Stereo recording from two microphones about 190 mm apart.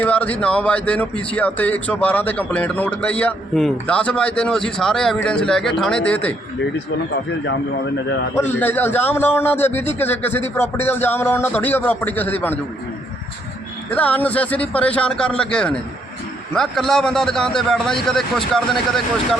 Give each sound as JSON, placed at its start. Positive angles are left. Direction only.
{"t": 0.0, "sound": "a man's voice", "side_deg": 5}
{"t": 8.4, "sound": "a man's voice", "side_deg": 10}
{"t": 13.9, "sound": "a man's voice", "side_deg": 10}